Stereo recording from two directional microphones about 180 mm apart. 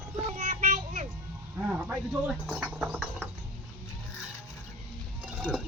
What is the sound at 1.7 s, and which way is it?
Speech, 10° right (ahead or behind).